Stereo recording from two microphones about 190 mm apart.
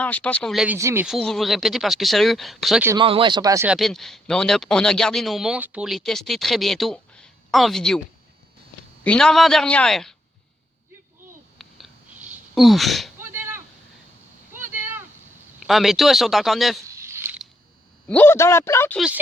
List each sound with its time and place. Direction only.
0.0 s speech: 5° left (ahead or behind)
0.8 s speech: 15° right (ahead or behind)
1.0 s speech: centre (ahead or behind)
3.0 s speech: 25° right (ahead or behind)
3.7 s speech: centre (ahead or behind)
9.0 s speech: 5° left (ahead or behind)
11.5 s a sound: centre (ahead or behind)
13.3 s a sound: 10° right (ahead or behind)
15.6 s speech: centre (ahead or behind)
16.9 s a sound: 15° right (ahead or behind)
18.1 s speech: 10° left (ahead or behind)
18.9 s speech: 5° right (ahead or behind)